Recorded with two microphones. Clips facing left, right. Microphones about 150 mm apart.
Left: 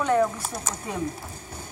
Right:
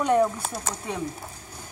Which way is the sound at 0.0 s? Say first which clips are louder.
Right 1 dB; 15° right (ahead or behind).